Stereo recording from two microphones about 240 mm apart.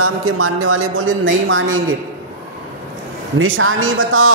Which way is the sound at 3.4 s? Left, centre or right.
Right.